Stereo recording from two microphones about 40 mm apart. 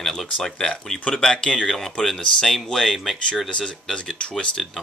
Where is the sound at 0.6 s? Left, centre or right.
Left.